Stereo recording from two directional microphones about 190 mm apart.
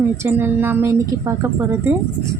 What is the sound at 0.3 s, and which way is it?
Speech, 10° right (ahead or behind).